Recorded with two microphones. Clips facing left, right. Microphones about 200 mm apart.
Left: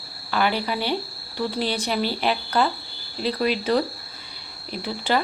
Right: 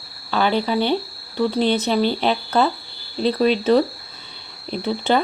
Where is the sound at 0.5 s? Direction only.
25° right (ahead or behind).